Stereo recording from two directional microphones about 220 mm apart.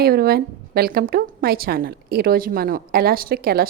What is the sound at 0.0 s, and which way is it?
A woman's voice, 45° right (ahead or behind).